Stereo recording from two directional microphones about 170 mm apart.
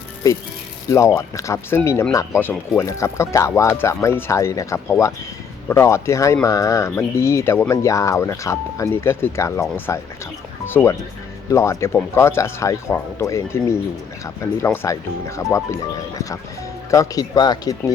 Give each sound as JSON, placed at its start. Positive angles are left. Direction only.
{"t": 0.9, "sound": "speech", "side_deg": 20}